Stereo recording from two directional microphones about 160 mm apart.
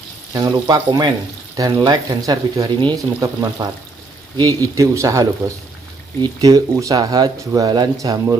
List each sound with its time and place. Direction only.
0.3 s speech: 20° right (ahead or behind)